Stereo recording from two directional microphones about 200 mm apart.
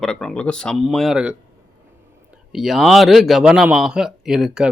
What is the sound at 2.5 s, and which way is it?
A man's voice, centre (ahead or behind).